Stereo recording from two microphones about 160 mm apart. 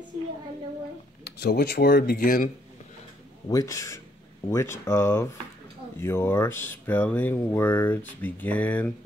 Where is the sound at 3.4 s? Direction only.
20° left (ahead or behind).